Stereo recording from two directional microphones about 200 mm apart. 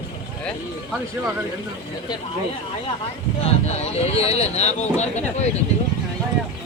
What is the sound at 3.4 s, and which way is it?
Speech, 30° left (ahead or behind).